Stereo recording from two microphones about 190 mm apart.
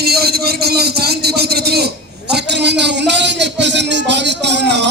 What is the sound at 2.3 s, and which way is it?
Music, 65° right (ahead or behind).